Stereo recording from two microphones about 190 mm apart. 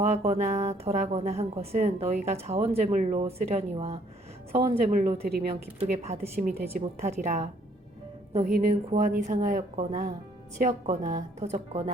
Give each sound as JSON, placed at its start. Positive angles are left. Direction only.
{"t": 0.0, "sound": "speech", "side_deg": -35}
{"t": 5.2, "sound": "speech", "side_deg": -55}
{"t": 6.1, "sound": "a woman's voice", "side_deg": -35}